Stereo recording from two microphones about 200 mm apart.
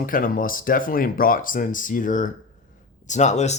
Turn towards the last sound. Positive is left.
turn(degrees=35)  # may be behind; listen again after turning